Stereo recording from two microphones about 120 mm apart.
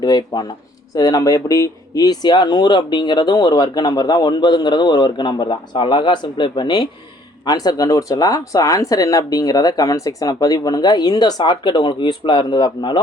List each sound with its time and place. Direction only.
0.0 s speech: 35° left (ahead or behind)